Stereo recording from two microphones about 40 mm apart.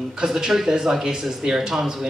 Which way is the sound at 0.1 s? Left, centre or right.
Centre.